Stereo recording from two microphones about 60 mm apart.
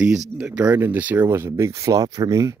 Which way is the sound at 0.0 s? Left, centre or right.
Right.